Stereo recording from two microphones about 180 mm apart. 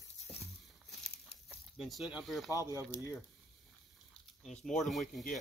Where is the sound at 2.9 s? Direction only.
15° left (ahead or behind).